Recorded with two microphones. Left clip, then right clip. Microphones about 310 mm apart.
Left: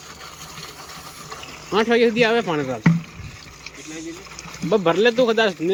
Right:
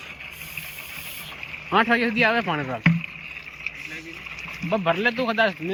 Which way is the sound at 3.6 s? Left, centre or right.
Centre.